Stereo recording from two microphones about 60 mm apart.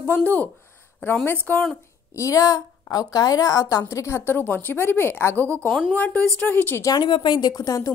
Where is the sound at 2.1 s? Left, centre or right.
Left.